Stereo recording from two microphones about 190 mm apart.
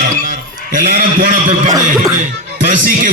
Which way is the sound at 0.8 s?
50° right (ahead or behind).